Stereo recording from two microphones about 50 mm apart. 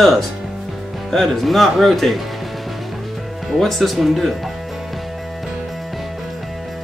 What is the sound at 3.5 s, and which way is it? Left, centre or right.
Speech, centre.